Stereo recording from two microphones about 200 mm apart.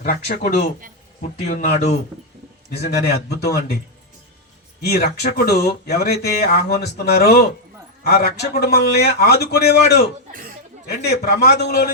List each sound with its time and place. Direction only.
0.0 s speech: 40° left (ahead or behind)
2.6 s a man's voice: 50° left (ahead or behind)
4.8 s speech: 50° left (ahead or behind)